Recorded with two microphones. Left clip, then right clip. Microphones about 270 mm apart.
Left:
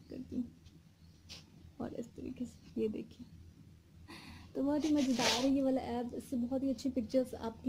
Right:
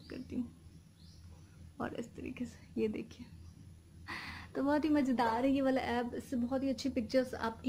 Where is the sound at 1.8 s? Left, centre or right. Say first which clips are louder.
Right 2 dB; centre.